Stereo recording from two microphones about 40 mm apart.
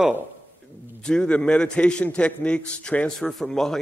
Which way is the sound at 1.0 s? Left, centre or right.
Left.